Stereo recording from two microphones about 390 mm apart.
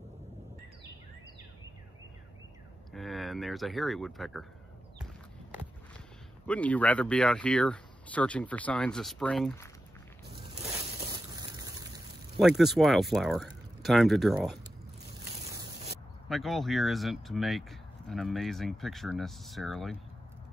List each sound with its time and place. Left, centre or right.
2.9 s speech: centre
6.4 s speech: centre
10.5 s a sound: centre
12.4 s speech: centre
15.5 s spray: centre
16.3 s speech: centre